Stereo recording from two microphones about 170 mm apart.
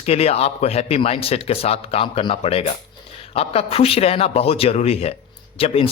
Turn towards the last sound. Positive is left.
turn(degrees=35)  # may be behind; listen again after turning